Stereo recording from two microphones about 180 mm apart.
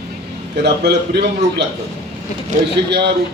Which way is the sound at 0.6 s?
65° right (ahead or behind).